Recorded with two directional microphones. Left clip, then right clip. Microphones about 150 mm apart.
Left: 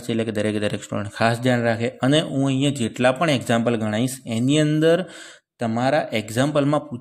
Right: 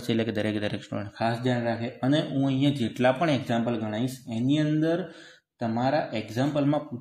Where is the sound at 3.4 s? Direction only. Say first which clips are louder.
Left 7 dB; 65° left (ahead or behind).